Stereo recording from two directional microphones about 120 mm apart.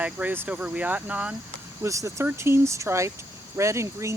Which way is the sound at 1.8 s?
25° right (ahead or behind).